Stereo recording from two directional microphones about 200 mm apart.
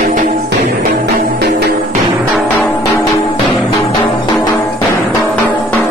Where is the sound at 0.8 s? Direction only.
50° right (ahead or behind).